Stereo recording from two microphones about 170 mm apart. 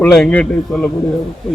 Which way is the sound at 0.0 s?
5° left (ahead or behind).